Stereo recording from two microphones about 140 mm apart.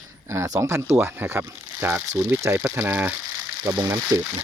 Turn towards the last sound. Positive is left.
turn(degrees=-25)  # may be behind; listen again after turning